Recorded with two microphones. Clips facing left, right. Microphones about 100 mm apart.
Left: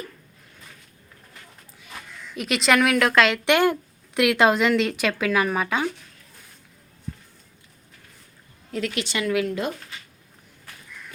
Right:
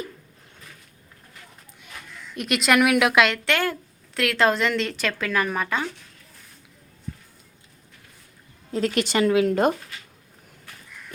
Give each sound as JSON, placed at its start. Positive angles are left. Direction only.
{"t": 2.3, "sound": "a woman's voice", "side_deg": 0}
{"t": 3.4, "sound": "speech", "side_deg": 20}
{"t": 8.7, "sound": "a woman's voice", "side_deg": -40}